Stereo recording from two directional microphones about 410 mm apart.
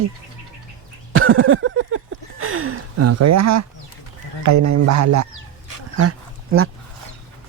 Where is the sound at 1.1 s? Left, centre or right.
Right.